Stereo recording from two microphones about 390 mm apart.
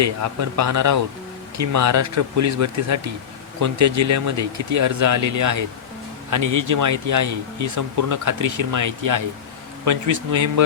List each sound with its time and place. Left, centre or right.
0.0 s speech: right